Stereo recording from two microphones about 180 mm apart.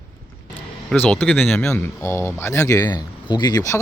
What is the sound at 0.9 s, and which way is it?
Speech, 5° left (ahead or behind).